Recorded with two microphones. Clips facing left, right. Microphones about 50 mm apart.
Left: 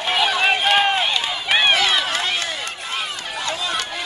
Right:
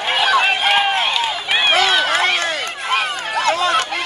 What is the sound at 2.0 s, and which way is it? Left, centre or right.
Run, right.